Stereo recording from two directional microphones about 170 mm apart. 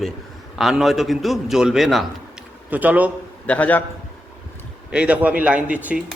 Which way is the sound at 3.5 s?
10° left (ahead or behind).